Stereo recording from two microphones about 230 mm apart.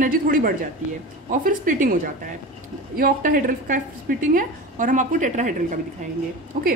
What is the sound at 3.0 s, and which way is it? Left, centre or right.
A woman's voice, right.